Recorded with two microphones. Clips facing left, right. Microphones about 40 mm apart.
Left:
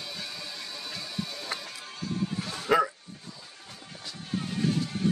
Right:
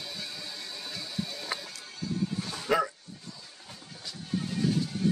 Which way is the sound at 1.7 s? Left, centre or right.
Left.